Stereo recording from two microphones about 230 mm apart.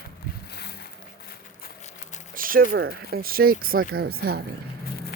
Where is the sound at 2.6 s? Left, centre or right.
Right.